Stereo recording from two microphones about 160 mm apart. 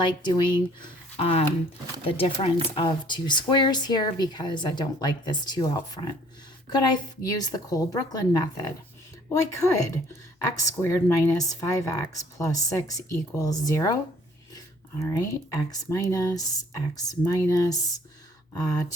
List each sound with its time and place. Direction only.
0.0 s a woman's voice: 30° left (ahead or behind)
1.1 s a woman's voice: 40° left (ahead or behind); by 18.9 s 25° left (ahead or behind)